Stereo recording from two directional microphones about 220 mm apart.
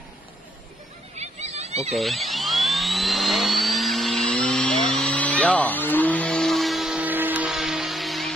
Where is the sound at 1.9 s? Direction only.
Centre (ahead or behind).